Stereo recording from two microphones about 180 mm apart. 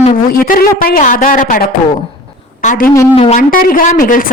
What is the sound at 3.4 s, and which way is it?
Speech, 50° left (ahead or behind).